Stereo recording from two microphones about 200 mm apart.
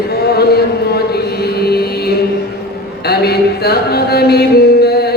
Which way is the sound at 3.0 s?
50° left (ahead or behind).